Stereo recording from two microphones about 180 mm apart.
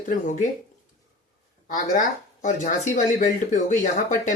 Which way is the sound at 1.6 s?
45° left (ahead or behind).